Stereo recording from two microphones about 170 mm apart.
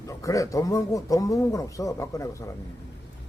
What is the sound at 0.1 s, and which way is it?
A man's voice, 20° left (ahead or behind).